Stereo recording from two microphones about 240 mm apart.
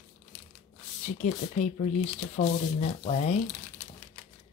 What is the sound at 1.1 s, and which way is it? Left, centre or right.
Speech, left.